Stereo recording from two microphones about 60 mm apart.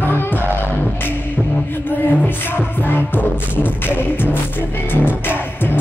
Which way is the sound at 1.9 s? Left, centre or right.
Left.